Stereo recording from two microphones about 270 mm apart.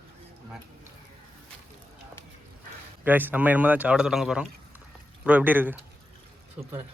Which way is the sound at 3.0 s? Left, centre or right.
Centre.